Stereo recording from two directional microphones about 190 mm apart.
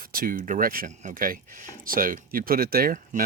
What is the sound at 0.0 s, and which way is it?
Speech, 50° right (ahead or behind).